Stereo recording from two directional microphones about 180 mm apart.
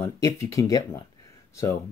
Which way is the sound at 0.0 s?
15° left (ahead or behind).